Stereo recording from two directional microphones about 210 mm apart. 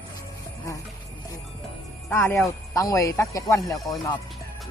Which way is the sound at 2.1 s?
10° left (ahead or behind).